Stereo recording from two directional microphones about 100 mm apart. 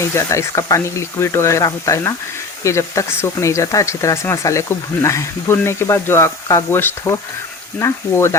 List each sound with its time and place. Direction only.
0.0 s speech: 30° left (ahead or behind)